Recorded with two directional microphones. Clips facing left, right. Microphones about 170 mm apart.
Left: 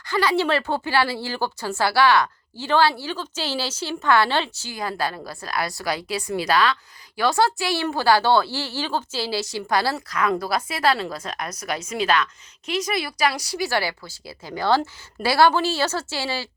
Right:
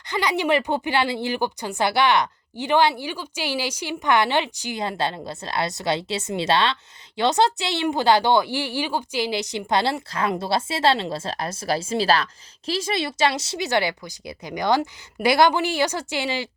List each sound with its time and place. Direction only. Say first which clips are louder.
0.0 s a woman's voice: left 2 dB; 20° right (ahead or behind)